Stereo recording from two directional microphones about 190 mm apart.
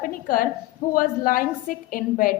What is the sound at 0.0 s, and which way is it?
A woman's voice, 50° left (ahead or behind).